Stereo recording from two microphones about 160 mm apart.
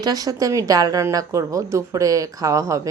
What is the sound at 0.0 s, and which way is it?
A woman's voice, 25° right (ahead or behind).